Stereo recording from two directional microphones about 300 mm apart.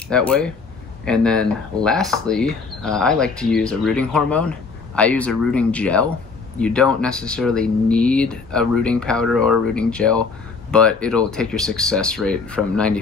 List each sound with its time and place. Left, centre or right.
0.1 s speech: centre